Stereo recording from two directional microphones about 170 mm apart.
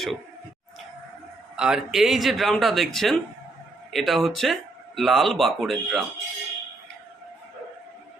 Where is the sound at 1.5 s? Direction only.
5° right (ahead or behind).